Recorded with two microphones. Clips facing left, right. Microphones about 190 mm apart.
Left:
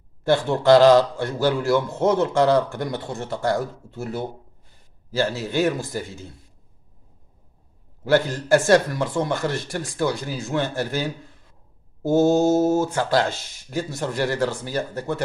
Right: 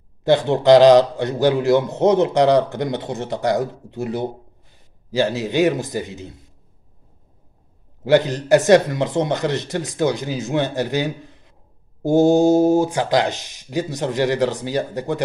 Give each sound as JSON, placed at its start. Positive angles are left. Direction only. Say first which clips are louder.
{"t": 0.2, "sound": "a man's voice", "louder": "right 4 dB", "side_deg": -20}
{"t": 8.0, "sound": "a man's voice", "louder": "right 4 dB", "side_deg": -20}